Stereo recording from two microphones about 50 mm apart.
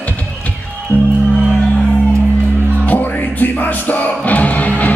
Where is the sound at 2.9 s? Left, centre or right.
Left.